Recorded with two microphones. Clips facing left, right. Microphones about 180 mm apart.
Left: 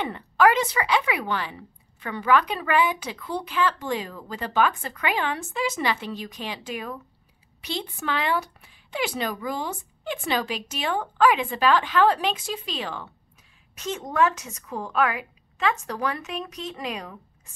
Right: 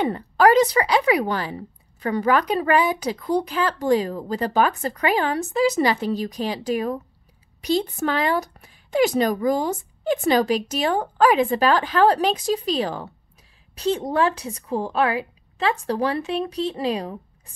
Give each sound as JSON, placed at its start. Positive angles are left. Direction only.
{"t": 0.0, "sound": "a woman's voice", "side_deg": -40}